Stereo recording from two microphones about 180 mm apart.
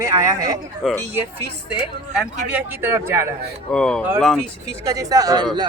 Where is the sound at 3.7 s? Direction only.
5° left (ahead or behind).